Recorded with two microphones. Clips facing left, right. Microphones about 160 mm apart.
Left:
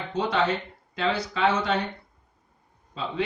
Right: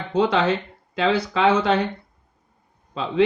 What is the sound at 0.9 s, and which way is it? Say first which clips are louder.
Speech: right 6 dB; 90° right.